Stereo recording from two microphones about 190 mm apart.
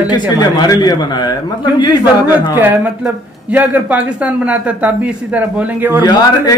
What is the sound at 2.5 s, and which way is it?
Speech, 10° right (ahead or behind).